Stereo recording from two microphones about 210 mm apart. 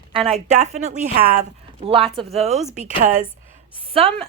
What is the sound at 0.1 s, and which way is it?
A woman's voice, 30° right (ahead or behind).